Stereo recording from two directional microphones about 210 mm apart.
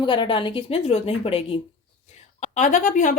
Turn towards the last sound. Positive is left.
turn(degrees=40)  # may be behind; listen again after turning